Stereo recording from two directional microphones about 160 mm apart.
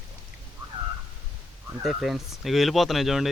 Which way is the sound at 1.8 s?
Centre (ahead or behind).